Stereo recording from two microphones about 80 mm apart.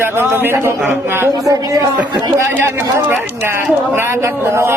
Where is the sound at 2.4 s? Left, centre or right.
Right.